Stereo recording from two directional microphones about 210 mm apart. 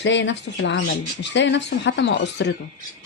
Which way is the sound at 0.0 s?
60° left (ahead or behind).